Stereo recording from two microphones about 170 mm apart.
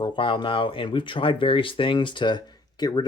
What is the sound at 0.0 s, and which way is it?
Speech, 25° left (ahead or behind).